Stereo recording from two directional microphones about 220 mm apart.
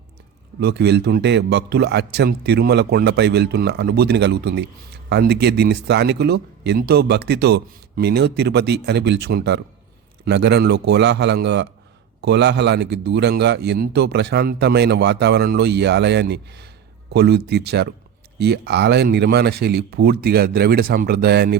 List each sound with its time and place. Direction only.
0.6 s a man's voice: 50° right (ahead or behind)